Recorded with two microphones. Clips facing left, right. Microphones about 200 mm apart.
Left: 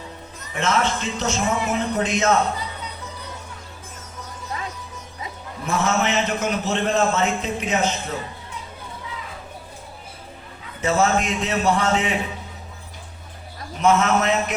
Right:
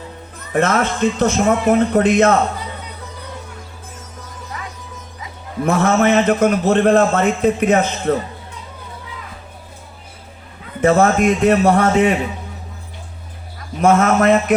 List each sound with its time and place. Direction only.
0.5 s a man's voice: 50° right (ahead or behind)
5.6 s a man's voice: 55° right (ahead or behind)
10.8 s a man's voice: 55° right (ahead or behind)
13.8 s a man's voice: 50° right (ahead or behind)